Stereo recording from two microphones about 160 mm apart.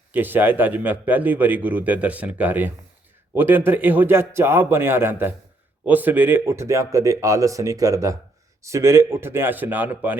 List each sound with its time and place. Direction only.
0.1 s a man's voice: 10° right (ahead or behind)